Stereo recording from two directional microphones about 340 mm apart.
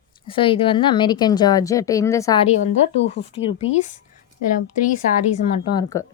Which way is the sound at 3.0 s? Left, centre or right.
Left.